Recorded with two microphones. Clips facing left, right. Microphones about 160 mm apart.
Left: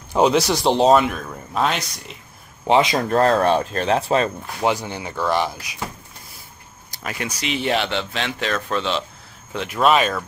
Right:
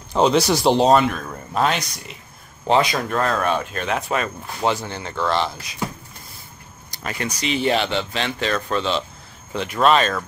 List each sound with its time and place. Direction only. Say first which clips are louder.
0.1 s speech: even; 5° left (ahead or behind)
2.6 s speech: left 1 dB; 20° left (ahead or behind)
3.1 s speech: left 5 dB; 35° left (ahead or behind)
4.6 s speech: left 1 dB; 15° left (ahead or behind)
6.9 s speech: right 1 dB; 5° left (ahead or behind)